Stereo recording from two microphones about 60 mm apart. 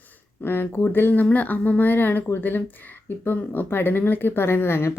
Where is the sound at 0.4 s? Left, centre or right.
Left.